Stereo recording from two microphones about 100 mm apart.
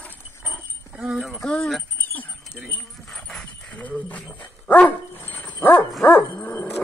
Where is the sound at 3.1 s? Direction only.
5° left (ahead or behind).